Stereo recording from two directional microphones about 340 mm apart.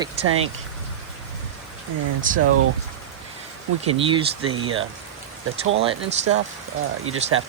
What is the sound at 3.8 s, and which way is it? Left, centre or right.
Speech, centre.